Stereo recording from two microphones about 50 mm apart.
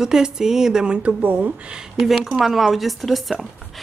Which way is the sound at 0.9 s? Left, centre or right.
Right.